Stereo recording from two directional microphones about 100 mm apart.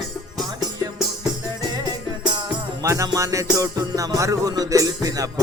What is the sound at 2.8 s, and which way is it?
Music, 35° right (ahead or behind).